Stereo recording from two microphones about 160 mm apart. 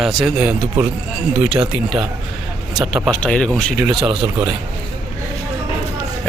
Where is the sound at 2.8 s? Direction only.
5° right (ahead or behind).